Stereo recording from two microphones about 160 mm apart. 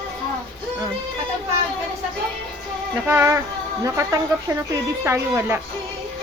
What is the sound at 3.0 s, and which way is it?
Speech, 15° right (ahead or behind).